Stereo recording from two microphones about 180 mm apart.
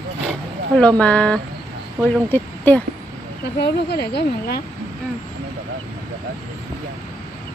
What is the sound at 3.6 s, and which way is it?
Speech, 65° left (ahead or behind).